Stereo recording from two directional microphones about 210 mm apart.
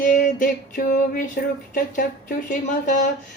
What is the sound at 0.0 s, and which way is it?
Music, 40° left (ahead or behind).